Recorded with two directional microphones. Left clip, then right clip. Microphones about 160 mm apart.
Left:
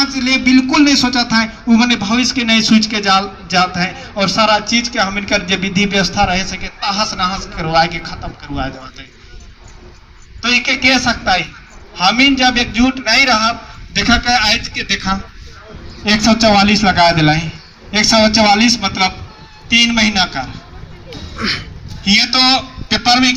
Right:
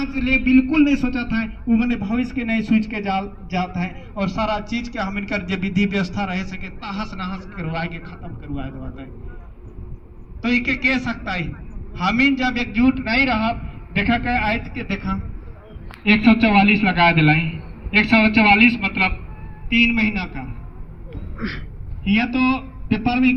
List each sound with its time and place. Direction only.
0.0 s a man's voice: 60° left (ahead or behind)
10.4 s a man's voice: 60° left (ahead or behind)
11.9 s a man's voice: 80° left
14.5 s a man's voice: 90° left; by 15.2 s 70° left (ahead or behind)
16.0 s a man's voice: 45° left (ahead or behind)
21.3 s speech: 15° left (ahead or behind)
22.0 s a man's voice: 45° left (ahead or behind)